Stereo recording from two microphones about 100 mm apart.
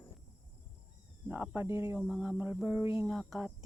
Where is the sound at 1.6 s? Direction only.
30° right (ahead or behind).